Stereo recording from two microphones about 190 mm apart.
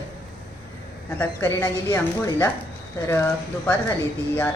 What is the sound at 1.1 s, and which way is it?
Speech, 10° left (ahead or behind).